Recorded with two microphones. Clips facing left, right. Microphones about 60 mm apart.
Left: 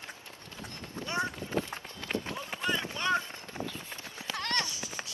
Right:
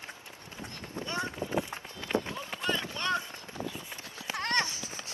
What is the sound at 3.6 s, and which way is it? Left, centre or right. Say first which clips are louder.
Run: even; left.